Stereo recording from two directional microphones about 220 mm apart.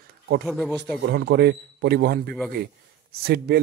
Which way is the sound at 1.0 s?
50° right (ahead or behind).